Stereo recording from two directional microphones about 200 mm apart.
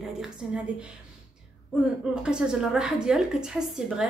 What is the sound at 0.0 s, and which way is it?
Speech, 5° right (ahead or behind).